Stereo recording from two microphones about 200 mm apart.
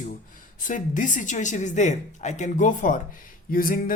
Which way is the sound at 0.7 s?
40° left (ahead or behind).